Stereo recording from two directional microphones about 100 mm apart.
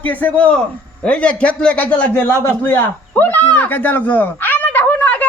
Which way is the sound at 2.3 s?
25° left (ahead or behind).